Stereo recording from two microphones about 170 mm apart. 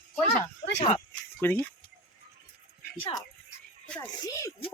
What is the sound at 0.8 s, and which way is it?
Speech, 35° left (ahead or behind).